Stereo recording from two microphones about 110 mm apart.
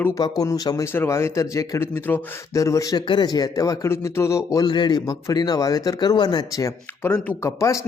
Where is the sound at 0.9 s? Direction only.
20° left (ahead or behind).